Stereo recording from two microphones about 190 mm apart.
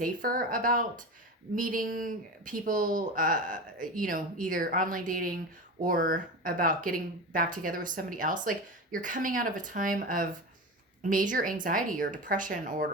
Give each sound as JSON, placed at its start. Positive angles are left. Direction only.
{"t": 0.0, "sound": "speech", "side_deg": -50}